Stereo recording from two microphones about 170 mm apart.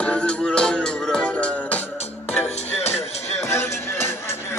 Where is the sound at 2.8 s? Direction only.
40° left (ahead or behind).